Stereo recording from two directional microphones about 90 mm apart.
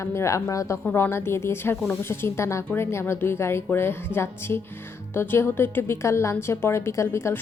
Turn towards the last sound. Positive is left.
turn(degrees=30)  # may be behind; listen again after turning